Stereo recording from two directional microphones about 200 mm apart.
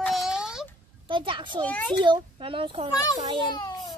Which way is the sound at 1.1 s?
25° right (ahead or behind).